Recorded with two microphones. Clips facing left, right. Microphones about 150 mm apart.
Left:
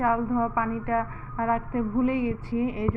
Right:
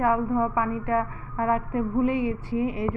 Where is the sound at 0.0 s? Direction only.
20° right (ahead or behind).